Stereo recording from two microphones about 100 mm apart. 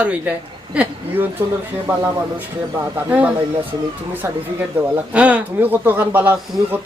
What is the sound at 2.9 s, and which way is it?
Speech, 15° right (ahead or behind).